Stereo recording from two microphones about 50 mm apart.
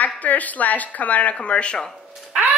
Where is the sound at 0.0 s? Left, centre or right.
Left.